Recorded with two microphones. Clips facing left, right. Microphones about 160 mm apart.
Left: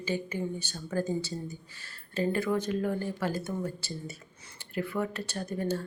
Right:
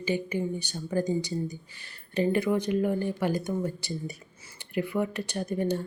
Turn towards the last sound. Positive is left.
turn(degrees=-15)  # may be behind; listen again after turning